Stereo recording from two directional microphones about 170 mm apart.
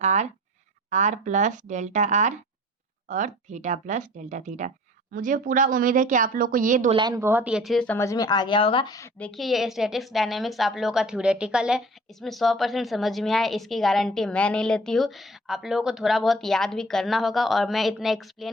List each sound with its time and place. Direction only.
0.0 s speech: 45° right (ahead or behind)
7.1 s a woman's voice: 15° right (ahead or behind); by 7.9 s centre (ahead or behind)
7.9 s a woman's voice: 20° left (ahead or behind)
9.1 s a woman's voice: 5° left (ahead or behind)